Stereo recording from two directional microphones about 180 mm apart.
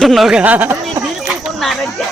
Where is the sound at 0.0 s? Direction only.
Centre (ahead or behind).